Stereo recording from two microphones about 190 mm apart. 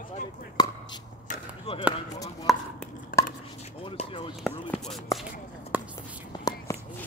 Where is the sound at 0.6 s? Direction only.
20° left (ahead or behind).